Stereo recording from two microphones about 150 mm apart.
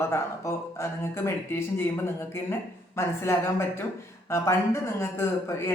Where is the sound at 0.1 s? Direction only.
15° left (ahead or behind).